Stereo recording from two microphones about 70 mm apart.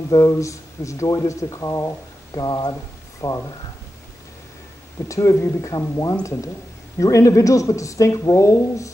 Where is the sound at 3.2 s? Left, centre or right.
Left.